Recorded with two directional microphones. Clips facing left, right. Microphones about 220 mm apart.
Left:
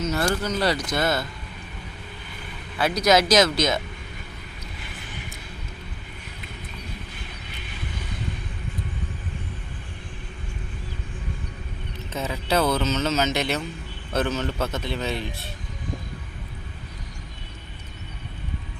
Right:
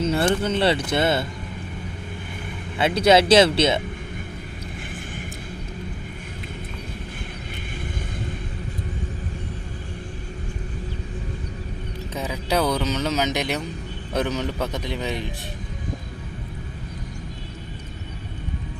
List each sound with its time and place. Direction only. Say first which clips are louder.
0.0 s speech: right 4 dB; 30° right (ahead or behind)
2.7 s speech: right 3 dB; 25° right (ahead or behind)
12.1 s speech: even; 10° right (ahead or behind)